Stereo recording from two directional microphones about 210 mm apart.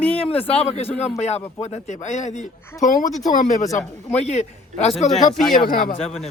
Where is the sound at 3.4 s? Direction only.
35° left (ahead or behind).